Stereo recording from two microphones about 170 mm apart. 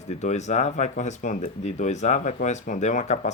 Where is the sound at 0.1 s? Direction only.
40° left (ahead or behind).